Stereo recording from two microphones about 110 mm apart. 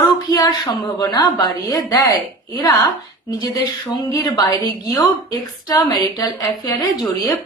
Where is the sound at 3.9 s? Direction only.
35° left (ahead or behind).